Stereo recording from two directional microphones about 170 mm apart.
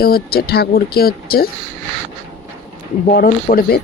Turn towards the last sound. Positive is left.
turn(degrees=60)  # may be behind; listen again after turning